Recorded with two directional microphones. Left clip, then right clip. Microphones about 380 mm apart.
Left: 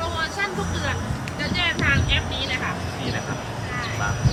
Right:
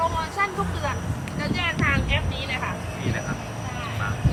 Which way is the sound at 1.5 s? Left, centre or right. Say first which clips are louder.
Left 2 dB; right.